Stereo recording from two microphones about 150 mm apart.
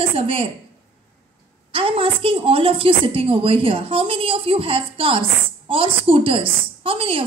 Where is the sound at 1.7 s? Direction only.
35° right (ahead or behind).